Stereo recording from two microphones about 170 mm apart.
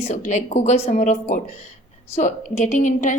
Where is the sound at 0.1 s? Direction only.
45° left (ahead or behind).